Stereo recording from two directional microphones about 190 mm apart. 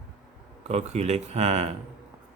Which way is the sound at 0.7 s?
35° right (ahead or behind).